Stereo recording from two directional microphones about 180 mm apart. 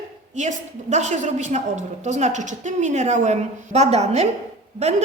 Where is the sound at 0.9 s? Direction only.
40° right (ahead or behind).